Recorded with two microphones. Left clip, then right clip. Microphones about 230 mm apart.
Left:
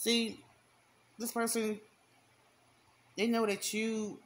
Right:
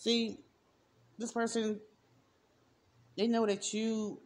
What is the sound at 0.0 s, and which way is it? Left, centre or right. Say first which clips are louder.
Speech: even; left.